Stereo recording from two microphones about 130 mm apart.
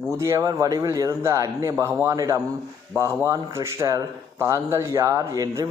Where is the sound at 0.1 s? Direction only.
20° right (ahead or behind).